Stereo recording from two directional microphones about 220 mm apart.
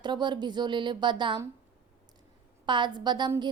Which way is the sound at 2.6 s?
20° right (ahead or behind).